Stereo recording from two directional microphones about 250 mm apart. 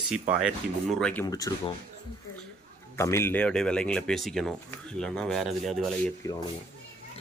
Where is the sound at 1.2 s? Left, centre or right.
Centre.